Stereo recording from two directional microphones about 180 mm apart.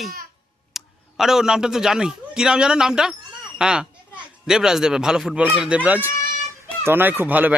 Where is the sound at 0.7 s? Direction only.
Centre (ahead or behind).